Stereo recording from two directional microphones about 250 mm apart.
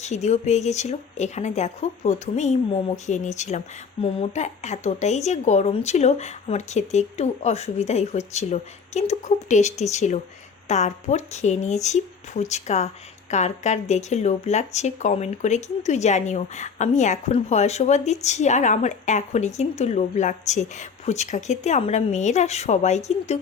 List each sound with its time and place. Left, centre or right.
0.0 s speech: left